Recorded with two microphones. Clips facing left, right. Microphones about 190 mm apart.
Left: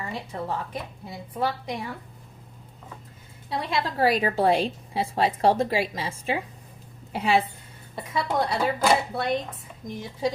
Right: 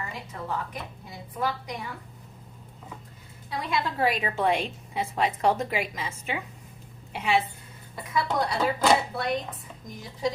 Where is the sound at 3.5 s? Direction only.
30° left (ahead or behind).